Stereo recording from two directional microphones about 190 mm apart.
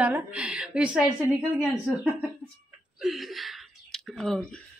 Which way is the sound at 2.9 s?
Centre (ahead or behind).